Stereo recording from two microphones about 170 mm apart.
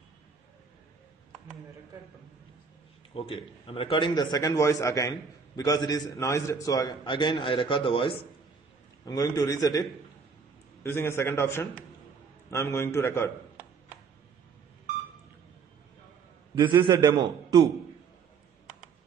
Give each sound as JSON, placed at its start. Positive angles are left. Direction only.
{"t": 3.2, "sound": "a man's voice", "side_deg": 30}
{"t": 9.0, "sound": "a man's voice", "side_deg": 20}
{"t": 16.6, "sound": "a man's voice", "side_deg": -30}